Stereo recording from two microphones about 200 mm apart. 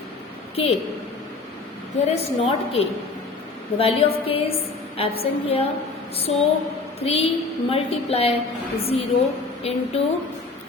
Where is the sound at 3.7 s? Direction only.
30° left (ahead or behind).